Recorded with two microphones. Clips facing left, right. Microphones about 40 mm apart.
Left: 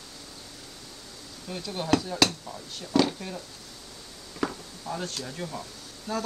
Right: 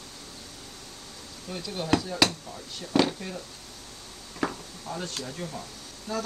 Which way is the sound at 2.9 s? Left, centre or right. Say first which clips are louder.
Even; right.